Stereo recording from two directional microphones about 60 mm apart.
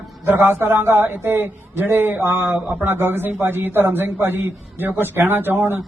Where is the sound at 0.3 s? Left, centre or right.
Right.